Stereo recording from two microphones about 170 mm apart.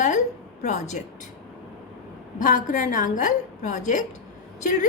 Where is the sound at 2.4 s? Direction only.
50° left (ahead or behind).